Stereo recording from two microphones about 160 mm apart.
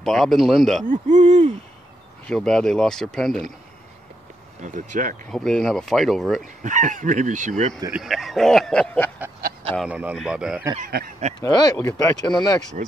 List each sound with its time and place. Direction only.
0.0 s speech: centre (ahead or behind)
0.8 s speech: 50° right (ahead or behind)
2.2 s speech: 5° left (ahead or behind)
4.6 s speech: 50° right (ahead or behind)
5.3 s speech: 5° left (ahead or behind)
6.6 s speech: 50° right (ahead or behind)
7.9 s speech: centre (ahead or behind)
9.8 s speech: 10° right (ahead or behind)
10.8 s speech: 70° right (ahead or behind)
11.3 s speech: 25° left (ahead or behind)
12.8 s speech: 55° right (ahead or behind)